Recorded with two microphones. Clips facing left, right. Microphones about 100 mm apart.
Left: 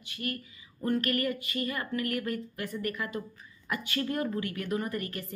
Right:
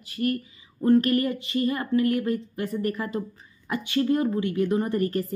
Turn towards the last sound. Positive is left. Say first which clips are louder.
# right 8 dB
turn(degrees=-35)  # may be behind; listen again after turning